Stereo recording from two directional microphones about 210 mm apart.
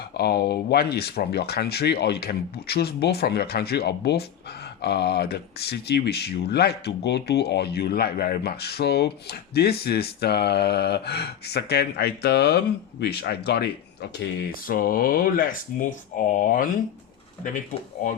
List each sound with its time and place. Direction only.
0.2 s speech: 50° left (ahead or behind)